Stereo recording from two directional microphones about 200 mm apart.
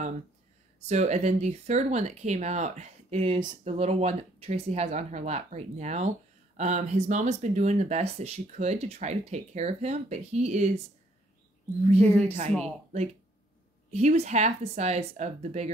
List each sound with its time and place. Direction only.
0.7 s speech: 35° right (ahead or behind)
12.0 s speech: 5° left (ahead or behind)
12.6 s speech: 35° right (ahead or behind)